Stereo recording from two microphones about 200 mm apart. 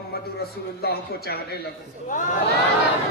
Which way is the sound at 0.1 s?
50° left (ahead or behind).